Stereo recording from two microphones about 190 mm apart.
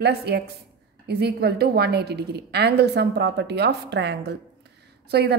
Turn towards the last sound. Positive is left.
turn(degrees=-60)  # may be behind; listen again after turning